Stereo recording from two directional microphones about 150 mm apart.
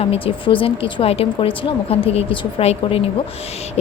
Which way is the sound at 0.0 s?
40° left (ahead or behind).